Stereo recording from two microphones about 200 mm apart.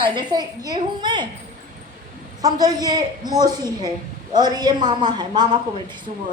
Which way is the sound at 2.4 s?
20° right (ahead or behind).